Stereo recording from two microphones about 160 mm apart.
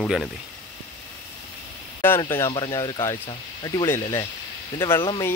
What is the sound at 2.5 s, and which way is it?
Speech, 25° left (ahead or behind).